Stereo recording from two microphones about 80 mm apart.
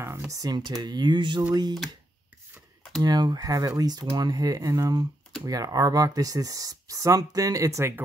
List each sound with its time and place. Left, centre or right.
0.3 s speech: right
1.5 s speech: right
3.0 s speech: right
3.3 s speech: right